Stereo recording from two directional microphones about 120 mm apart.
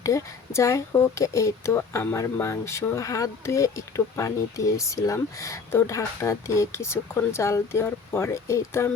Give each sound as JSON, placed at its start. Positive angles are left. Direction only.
{"t": 0.0, "sound": "speech", "side_deg": 25}